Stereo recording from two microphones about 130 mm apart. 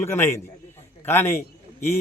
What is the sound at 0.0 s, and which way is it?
A man's voice, 20° left (ahead or behind).